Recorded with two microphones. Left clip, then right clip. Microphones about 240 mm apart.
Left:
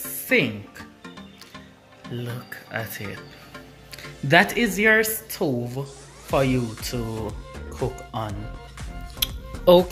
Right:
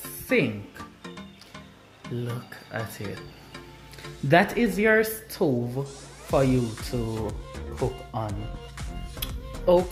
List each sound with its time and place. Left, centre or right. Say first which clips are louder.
0.3 s speech: left 3 dB; centre
2.2 s speech: left 2 dB; centre
4.3 s speech: left 3 dB; centre
9.2 s music: left 6 dB; centre